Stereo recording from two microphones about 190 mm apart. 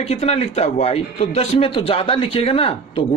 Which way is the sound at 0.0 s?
35° left (ahead or behind).